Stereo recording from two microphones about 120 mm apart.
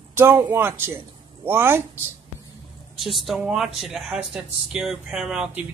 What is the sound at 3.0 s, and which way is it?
Speech, centre (ahead or behind).